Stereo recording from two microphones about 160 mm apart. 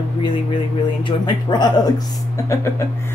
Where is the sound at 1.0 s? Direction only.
25° left (ahead or behind).